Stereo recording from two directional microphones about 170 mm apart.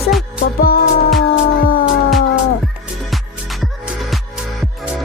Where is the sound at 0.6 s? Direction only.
60° left (ahead or behind).